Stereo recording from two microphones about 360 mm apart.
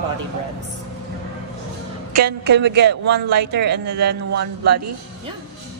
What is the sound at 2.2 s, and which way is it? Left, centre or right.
Speech, right.